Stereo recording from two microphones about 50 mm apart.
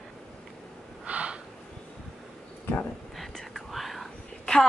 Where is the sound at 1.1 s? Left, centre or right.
Right.